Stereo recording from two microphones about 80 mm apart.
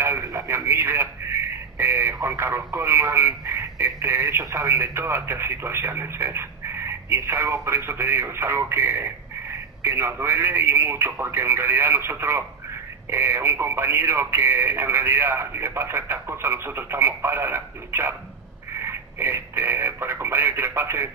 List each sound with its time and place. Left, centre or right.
0.2 s radio: right
2.1 s speech: right